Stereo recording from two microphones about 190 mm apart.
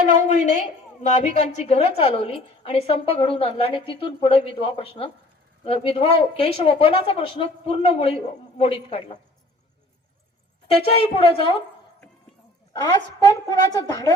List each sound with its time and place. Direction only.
0.1 s a woman's voice: 35° left (ahead or behind)
10.8 s a woman's voice: 30° left (ahead or behind)
12.7 s a woman's voice: 20° left (ahead or behind)